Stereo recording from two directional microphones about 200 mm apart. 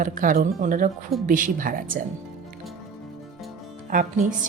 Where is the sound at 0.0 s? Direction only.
40° right (ahead or behind).